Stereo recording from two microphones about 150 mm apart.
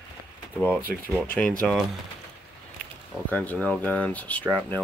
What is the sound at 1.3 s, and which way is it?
Speech, 5° left (ahead or behind).